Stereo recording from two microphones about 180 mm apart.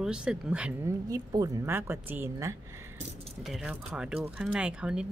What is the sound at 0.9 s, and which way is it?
Speech, 20° right (ahead or behind).